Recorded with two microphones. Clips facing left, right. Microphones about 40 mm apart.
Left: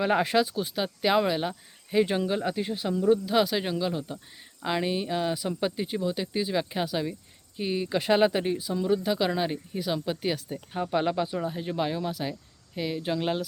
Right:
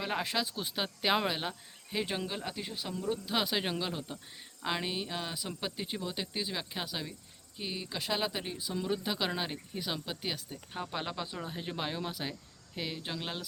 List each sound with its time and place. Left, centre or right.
0.0 s speech: centre
0.5 s cricket: centre
3.2 s cricket: centre
7.5 s speech: centre
8.5 s cricket: centre
10.7 s speech: centre
11.5 s cricket: centre